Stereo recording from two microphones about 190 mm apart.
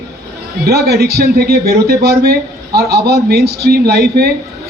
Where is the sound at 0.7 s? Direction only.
55° right (ahead or behind).